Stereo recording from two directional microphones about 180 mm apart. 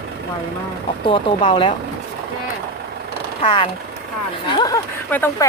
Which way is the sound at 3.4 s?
30° left (ahead or behind).